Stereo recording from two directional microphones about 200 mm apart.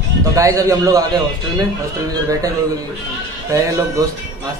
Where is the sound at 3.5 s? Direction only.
15° right (ahead or behind).